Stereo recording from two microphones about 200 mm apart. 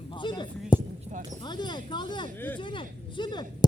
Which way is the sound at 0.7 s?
20° left (ahead or behind).